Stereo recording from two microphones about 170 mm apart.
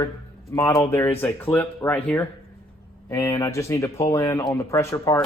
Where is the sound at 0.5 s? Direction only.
15° left (ahead or behind).